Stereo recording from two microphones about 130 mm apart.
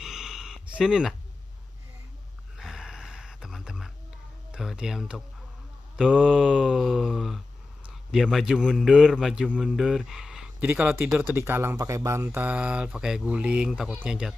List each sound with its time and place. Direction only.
0.0 s a sound: 5° right (ahead or behind)
0.7 s a man's voice: 5° right (ahead or behind)
2.5 s gasp: 5° right (ahead or behind)
4.5 s a man's voice: 5° right (ahead or behind)